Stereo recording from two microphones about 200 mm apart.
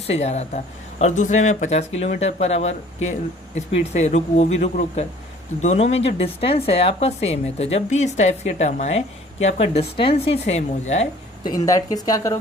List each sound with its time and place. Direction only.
0.1 s speech: 35° left (ahead or behind)
11.4 s speech: 15° left (ahead or behind)